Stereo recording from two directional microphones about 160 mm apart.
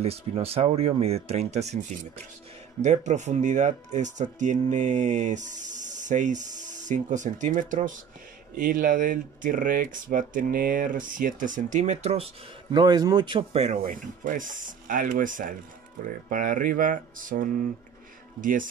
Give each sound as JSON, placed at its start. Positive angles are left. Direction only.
{"t": 0.0, "sound": "speech", "side_deg": -40}
{"t": 12.7, "sound": "speech", "side_deg": -25}